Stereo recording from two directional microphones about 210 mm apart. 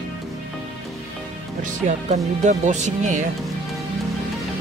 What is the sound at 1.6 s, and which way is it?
Speech, 35° right (ahead or behind).